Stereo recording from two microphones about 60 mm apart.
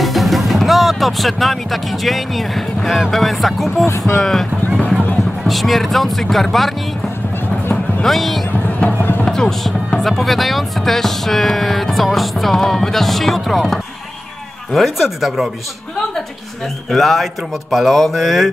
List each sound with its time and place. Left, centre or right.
0.0 s speech: centre
4.6 s music: centre
5.4 s speech: centre
7.7 s music: centre
9.2 s speech: centre
16.9 s speech: centre